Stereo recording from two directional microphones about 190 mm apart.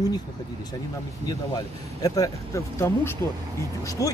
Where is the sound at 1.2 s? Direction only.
20° left (ahead or behind).